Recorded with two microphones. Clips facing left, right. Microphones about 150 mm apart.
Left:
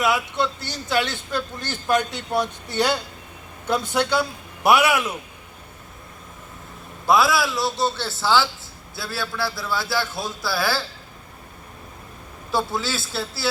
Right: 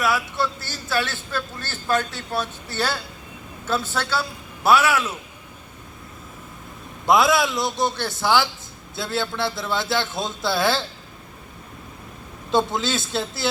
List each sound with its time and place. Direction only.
0.0 s speech: 20° left (ahead or behind)
7.1 s a man's voice: 20° right (ahead or behind)
12.5 s a man's voice: 20° right (ahead or behind)